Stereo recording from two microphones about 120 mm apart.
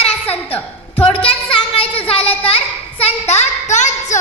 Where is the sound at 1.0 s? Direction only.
50° left (ahead or behind).